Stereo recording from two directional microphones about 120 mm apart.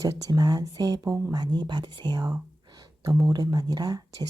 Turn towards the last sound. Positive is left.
turn(degrees=-35)  # may be behind; listen again after turning